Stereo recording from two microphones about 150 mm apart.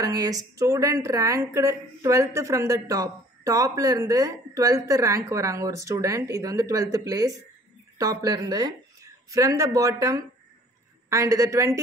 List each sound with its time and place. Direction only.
0.0 s a woman's voice: 25° right (ahead or behind)